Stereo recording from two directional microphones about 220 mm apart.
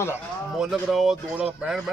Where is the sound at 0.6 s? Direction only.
Centre (ahead or behind).